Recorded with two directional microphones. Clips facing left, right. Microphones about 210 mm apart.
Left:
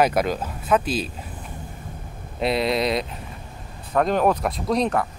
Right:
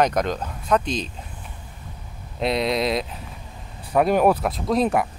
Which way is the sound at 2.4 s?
Centre (ahead or behind).